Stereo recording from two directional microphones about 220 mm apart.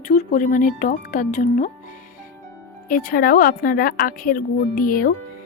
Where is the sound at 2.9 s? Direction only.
40° left (ahead or behind).